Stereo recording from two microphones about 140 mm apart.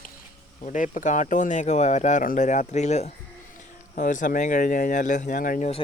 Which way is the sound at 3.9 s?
65° left (ahead or behind).